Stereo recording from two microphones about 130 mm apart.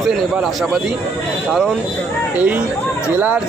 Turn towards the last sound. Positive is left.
turn(degrees=-15)  # may be behind; listen again after turning